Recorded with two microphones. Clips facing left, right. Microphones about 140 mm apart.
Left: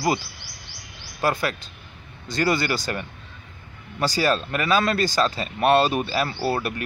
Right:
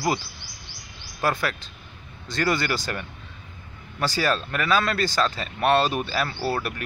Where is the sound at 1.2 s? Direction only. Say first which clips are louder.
Left 2 dB; 15° left (ahead or behind).